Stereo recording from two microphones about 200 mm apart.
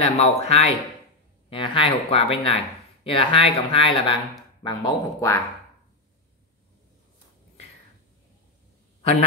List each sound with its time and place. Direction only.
0.0 s speech: 30° left (ahead or behind)